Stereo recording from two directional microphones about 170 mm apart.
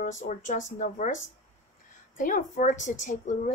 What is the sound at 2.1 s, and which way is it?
Speech, 50° left (ahead or behind).